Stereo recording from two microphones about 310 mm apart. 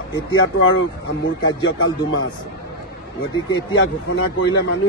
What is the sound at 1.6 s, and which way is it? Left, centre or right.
Speech, left.